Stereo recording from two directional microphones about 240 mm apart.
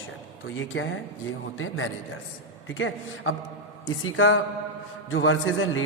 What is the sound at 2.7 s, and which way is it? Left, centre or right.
A man's voice, left.